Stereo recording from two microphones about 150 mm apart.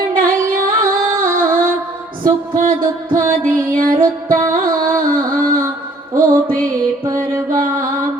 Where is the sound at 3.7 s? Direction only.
65° right (ahead or behind).